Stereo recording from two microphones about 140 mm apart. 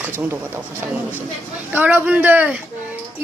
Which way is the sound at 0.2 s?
15° right (ahead or behind).